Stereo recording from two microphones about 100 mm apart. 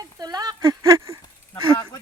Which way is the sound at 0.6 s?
30° right (ahead or behind).